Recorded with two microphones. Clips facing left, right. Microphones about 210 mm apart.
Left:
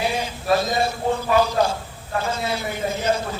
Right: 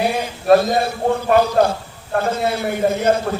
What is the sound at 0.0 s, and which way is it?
A man's voice, 55° right (ahead or behind).